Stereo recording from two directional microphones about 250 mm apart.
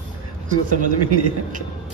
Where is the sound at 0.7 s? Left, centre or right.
Right.